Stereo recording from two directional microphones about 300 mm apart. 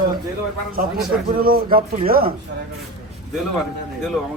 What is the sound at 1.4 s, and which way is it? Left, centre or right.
Speech, right.